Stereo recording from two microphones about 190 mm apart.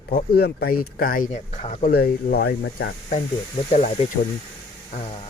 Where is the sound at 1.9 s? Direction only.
55° left (ahead or behind).